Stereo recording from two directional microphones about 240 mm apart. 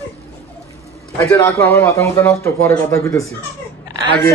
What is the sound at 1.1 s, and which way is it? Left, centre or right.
A man's voice, centre.